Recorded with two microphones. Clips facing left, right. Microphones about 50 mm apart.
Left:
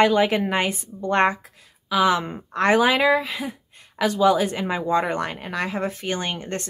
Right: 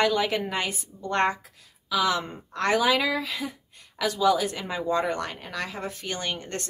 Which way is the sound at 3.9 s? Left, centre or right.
Left.